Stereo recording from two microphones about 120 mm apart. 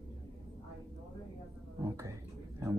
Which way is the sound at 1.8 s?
25° right (ahead or behind).